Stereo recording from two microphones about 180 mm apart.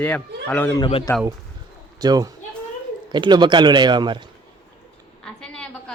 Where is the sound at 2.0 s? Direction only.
20° right (ahead or behind).